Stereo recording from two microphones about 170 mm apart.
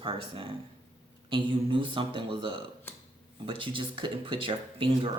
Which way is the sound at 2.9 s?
10° left (ahead or behind).